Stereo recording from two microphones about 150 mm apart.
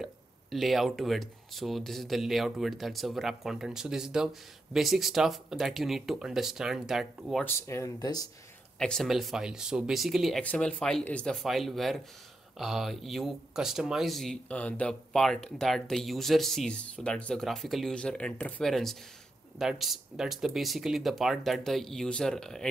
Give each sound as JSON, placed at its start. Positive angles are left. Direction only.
{"t": 0.0, "sound": "speech", "side_deg": 0}
{"t": 7.4, "sound": "speech", "side_deg": 20}
{"t": 8.7, "sound": "speech", "side_deg": 5}
{"t": 10.4, "sound": "speech", "side_deg": 10}